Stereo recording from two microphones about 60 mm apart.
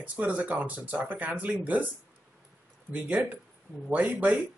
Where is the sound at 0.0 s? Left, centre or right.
Right.